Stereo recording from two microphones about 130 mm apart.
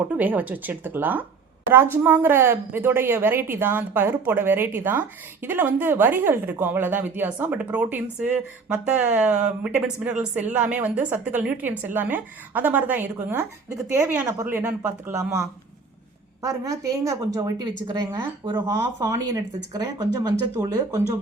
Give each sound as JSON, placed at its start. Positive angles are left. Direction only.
{"t": 0.1, "sound": "a woman's voice", "side_deg": -15}
{"t": 18.5, "sound": "a woman's voice", "side_deg": -20}